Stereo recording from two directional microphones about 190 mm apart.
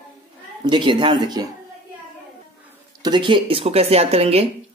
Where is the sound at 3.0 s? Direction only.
25° right (ahead or behind).